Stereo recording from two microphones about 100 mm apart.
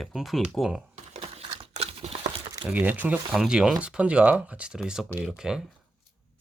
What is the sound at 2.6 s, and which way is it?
Speech, 15° right (ahead or behind).